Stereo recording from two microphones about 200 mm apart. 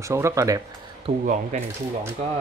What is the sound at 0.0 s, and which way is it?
Speech, 15° right (ahead or behind).